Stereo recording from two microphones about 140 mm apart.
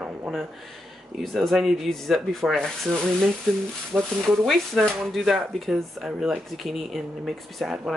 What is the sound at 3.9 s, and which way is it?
Speech, 15° right (ahead or behind).